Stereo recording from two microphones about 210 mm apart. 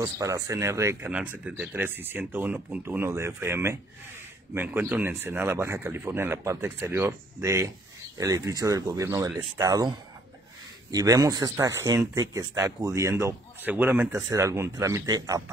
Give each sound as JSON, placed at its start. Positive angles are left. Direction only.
{"t": 0.0, "sound": "speech", "side_deg": -15}